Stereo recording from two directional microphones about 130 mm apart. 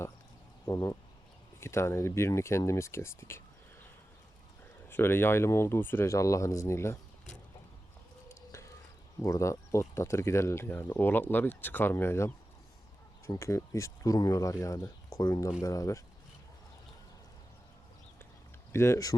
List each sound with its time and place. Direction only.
0.6 s a sound: 25° left (ahead or behind)
1.6 s speech: 20° left (ahead or behind)
4.9 s speech: 15° left (ahead or behind)
8.5 s a sound: 25° left (ahead or behind)
9.2 s speech: 25° left (ahead or behind)
18.7 s speech: 20° left (ahead or behind)